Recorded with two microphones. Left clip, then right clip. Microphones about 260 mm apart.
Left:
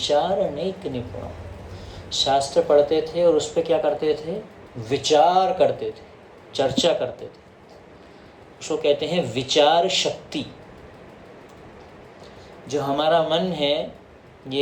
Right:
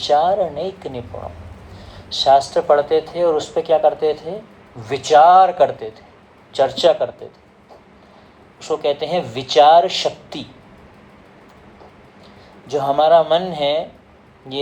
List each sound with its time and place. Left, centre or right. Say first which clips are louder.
0.0 s speech: right 5 dB; right
8.6 s speech: right 2 dB; right
12.6 s speech: right 7 dB; right